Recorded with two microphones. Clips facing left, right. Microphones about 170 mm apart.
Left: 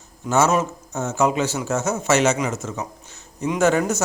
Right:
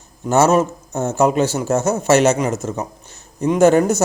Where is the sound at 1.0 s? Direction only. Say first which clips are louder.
Right 5 dB; 60° right (ahead or behind).